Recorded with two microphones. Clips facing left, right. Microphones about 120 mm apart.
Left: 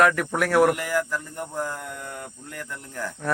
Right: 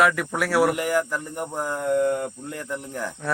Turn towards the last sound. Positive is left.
turn(degrees=-15)  # may be behind; listen again after turning